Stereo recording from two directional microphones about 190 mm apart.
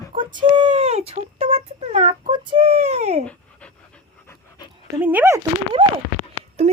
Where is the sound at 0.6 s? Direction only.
40° right (ahead or behind).